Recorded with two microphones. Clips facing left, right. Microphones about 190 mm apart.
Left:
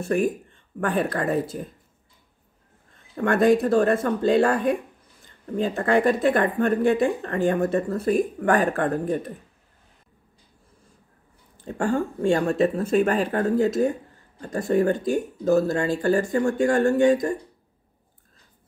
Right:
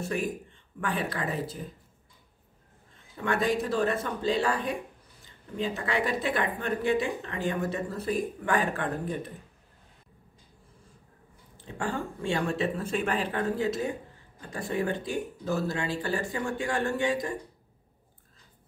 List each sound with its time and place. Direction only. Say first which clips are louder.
0.7 s speech: left 7 dB; 50° left (ahead or behind)
3.2 s speech: left 9 dB; 50° left (ahead or behind)
11.5 s speech: left 9 dB; 45° left (ahead or behind)